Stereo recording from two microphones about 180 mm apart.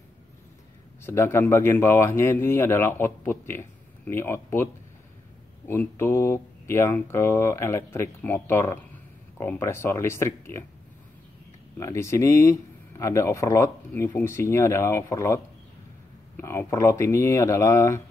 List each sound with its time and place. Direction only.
1.0 s speech: 15° left (ahead or behind)
5.7 s speech: 10° left (ahead or behind)
11.8 s speech: 15° left (ahead or behind)